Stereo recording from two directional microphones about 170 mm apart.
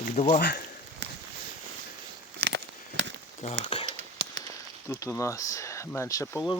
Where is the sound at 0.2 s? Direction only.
50° left (ahead or behind).